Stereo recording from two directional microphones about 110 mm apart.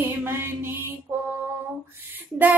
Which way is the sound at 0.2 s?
20° right (ahead or behind).